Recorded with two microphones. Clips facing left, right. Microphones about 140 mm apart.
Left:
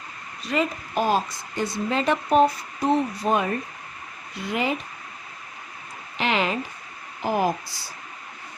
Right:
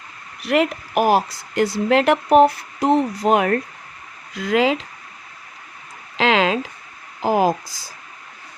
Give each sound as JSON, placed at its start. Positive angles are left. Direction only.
{"t": 0.3, "sound": "a woman's voice", "side_deg": -80}
{"t": 1.9, "sound": "speech", "side_deg": -75}
{"t": 6.1, "sound": "speech", "side_deg": -90}